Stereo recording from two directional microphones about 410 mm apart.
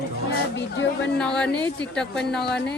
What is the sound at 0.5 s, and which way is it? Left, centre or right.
Speech, left.